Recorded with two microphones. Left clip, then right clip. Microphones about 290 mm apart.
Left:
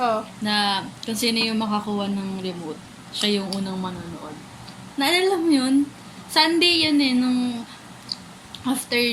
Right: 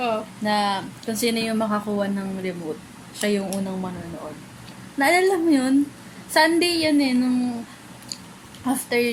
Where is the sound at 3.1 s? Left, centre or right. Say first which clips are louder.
Left 1 dB; right.